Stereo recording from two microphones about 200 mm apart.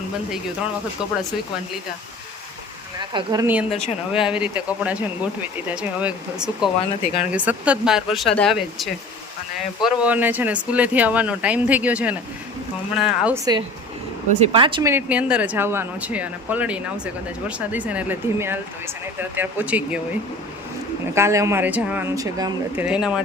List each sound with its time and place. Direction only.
3.0 s speech: 20° right (ahead or behind)
3.4 s speech: 10° right (ahead or behind)
3.7 s speech: 30° left (ahead or behind)
4.1 s speech: 5° right (ahead or behind)
7.0 s speech: 35° left (ahead or behind)
7.3 s speech: 5° right (ahead or behind)
10.0 s speech: 10° right (ahead or behind)
14.5 s speech: 25° right (ahead or behind); by 20.0 s 5° right (ahead or behind)
21.2 s speech: 15° right (ahead or behind)